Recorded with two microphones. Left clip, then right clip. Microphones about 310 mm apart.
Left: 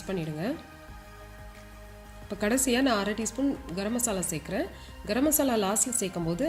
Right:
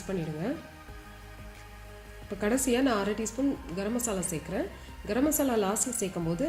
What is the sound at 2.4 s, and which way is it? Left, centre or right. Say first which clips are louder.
A woman's voice: left 1 dB; left.